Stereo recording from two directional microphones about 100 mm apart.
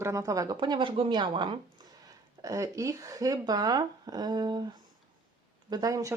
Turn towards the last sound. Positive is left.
turn(degrees=-35)  # may be behind; listen again after turning